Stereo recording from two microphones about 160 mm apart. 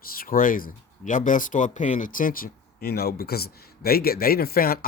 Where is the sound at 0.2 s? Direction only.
60° left (ahead or behind).